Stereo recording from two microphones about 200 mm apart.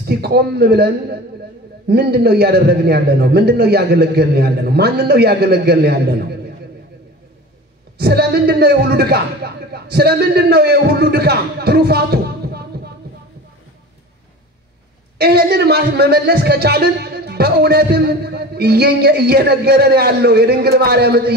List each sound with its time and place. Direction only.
0.0 s a man's voice: 55° right (ahead or behind)
8.0 s a man's voice: 55° right (ahead or behind)
15.1 s a man's voice: 55° right (ahead or behind)